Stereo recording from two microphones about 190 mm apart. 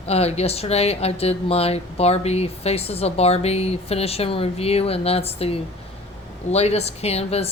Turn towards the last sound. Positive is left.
turn(degrees=35)  # may be behind; listen again after turning